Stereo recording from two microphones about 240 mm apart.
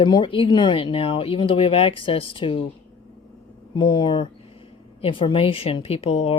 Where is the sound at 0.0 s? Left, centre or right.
Left.